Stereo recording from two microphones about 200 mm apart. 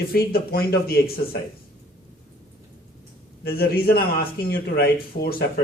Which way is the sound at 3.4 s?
50° left (ahead or behind).